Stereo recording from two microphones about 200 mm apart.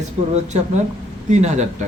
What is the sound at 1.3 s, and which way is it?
Speech, 35° right (ahead or behind).